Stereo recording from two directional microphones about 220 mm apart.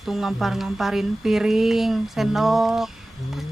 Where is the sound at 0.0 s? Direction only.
Centre (ahead or behind).